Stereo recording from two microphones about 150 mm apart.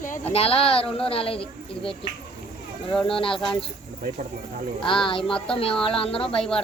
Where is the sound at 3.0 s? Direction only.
35° left (ahead or behind).